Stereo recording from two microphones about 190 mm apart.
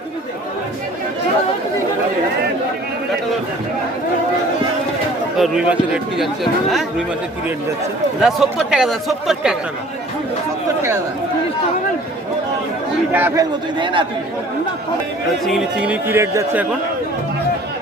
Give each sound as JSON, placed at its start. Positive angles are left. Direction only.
{"t": 5.4, "sound": "a man's voice", "side_deg": -5}
{"t": 8.2, "sound": "a man's voice", "side_deg": 0}
{"t": 13.1, "sound": "speech", "side_deg": -10}
{"t": 13.7, "sound": "speech", "side_deg": -25}
{"t": 15.4, "sound": "speech", "side_deg": -5}